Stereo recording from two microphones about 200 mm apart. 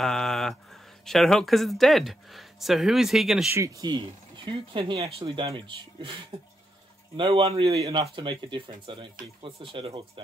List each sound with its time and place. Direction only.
0.0 s speech: centre (ahead or behind)
3.5 s speech: 15° right (ahead or behind)